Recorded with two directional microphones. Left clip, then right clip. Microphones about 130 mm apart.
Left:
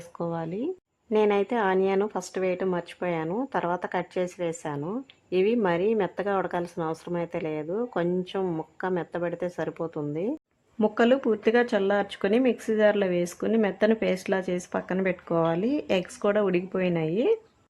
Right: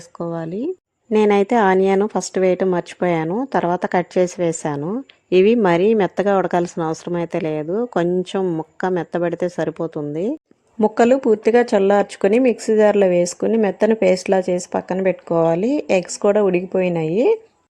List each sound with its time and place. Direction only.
0.2 s speech: 35° right (ahead or behind)
1.1 s a woman's voice: 50° right (ahead or behind)
3.2 s a woman's voice: 45° right (ahead or behind)
5.3 s a woman's voice: 60° right (ahead or behind); by 17.3 s 35° right (ahead or behind)